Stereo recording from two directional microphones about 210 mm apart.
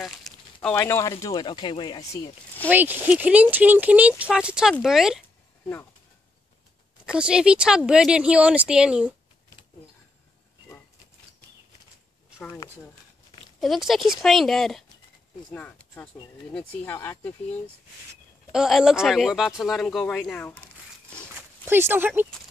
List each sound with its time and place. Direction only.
0.0 s a sound: centre (ahead or behind)
1.2 s speech: 20° left (ahead or behind)
2.7 s speech: 10° right (ahead or behind)
7.1 s speech: 5° right (ahead or behind)
13.6 s speech: centre (ahead or behind)
18.5 s speech: centre (ahead or behind)
21.4 s speech: 10° right (ahead or behind)